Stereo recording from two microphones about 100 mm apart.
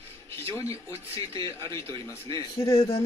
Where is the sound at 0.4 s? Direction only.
25° left (ahead or behind).